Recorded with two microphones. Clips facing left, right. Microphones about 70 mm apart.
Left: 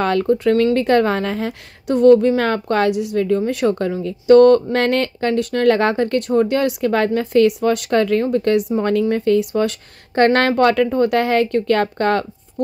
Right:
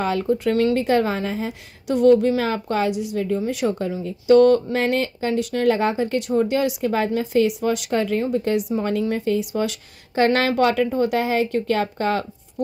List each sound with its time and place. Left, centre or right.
0.0 s speech: left
1.9 s speech: left
2.4 s speech: left
4.7 s speech: left